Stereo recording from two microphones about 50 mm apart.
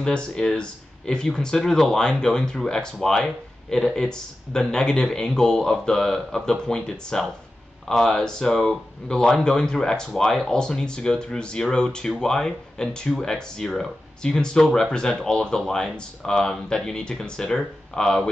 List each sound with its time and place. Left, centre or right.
0.0 s speech: centre